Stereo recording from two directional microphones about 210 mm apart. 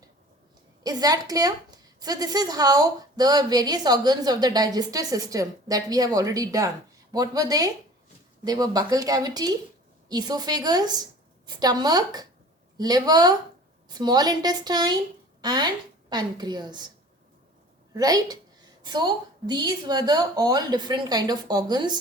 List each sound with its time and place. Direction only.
0.9 s a woman's voice: 20° right (ahead or behind)
17.9 s a woman's voice: 20° right (ahead or behind)